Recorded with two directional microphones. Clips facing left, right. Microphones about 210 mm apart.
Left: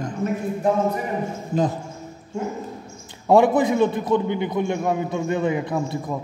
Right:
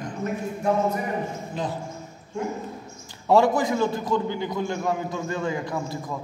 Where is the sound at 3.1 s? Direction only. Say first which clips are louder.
Left 3 dB; 20° left (ahead or behind).